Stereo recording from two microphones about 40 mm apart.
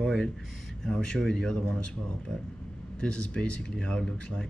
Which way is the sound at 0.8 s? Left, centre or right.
Left.